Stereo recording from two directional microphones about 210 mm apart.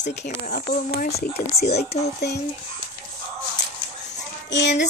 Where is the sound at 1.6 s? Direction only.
30° left (ahead or behind).